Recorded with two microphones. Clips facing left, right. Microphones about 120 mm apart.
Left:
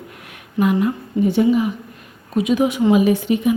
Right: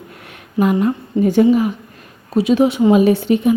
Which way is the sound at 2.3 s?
30° right (ahead or behind).